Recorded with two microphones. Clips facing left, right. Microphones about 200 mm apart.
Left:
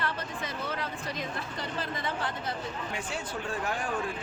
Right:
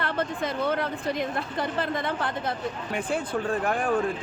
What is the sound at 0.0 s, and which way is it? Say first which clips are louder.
A woman's voice: right 7 dB; 55° right (ahead or behind).